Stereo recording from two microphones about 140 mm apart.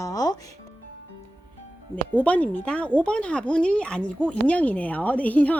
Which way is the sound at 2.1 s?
10° left (ahead or behind).